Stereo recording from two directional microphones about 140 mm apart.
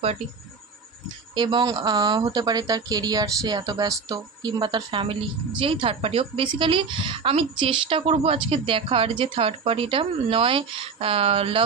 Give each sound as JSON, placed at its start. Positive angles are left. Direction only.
{"t": 1.0, "sound": "a woman's voice", "side_deg": -30}